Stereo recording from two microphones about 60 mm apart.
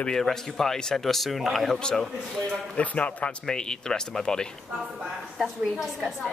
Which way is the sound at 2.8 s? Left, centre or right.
Left.